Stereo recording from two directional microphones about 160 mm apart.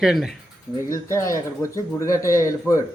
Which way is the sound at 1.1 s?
20° left (ahead or behind).